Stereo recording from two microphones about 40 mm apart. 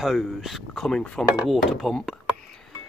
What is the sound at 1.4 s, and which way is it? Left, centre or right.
Speech, centre.